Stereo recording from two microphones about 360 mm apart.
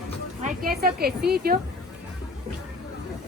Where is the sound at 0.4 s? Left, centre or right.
Right.